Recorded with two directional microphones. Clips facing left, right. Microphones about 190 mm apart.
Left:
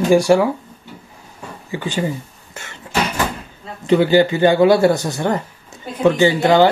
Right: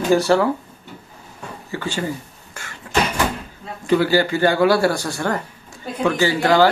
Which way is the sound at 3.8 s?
20° left (ahead or behind).